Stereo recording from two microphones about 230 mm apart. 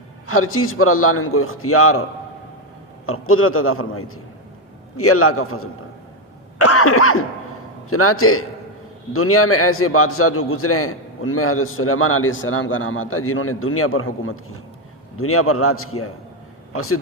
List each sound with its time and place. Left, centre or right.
0.3 s a man's voice: left
3.1 s a man's voice: left
6.6 s cough: left
7.9 s a man's voice: left